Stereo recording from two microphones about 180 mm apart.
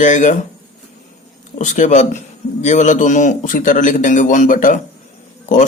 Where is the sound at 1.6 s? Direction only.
45° left (ahead or behind).